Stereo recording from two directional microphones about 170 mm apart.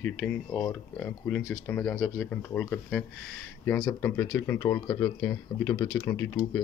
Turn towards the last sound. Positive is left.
turn(degrees=15)  # may be behind; listen again after turning